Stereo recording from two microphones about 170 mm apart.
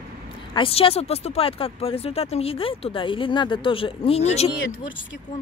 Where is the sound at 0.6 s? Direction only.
35° left (ahead or behind).